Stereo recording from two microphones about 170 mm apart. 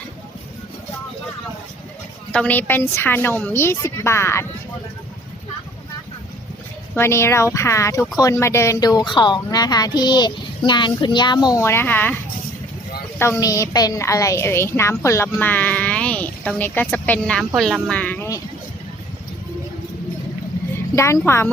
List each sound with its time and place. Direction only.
2.3 s a woman's voice: 10° left (ahead or behind)
6.9 s speech: 15° left (ahead or behind)
13.1 s a woman's voice: 15° left (ahead or behind)
20.9 s a woman's voice: 15° left (ahead or behind)